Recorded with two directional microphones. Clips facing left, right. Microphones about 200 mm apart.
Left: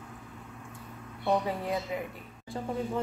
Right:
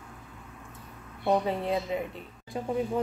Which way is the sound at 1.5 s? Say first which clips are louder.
Right 3 dB; 25° right (ahead or behind).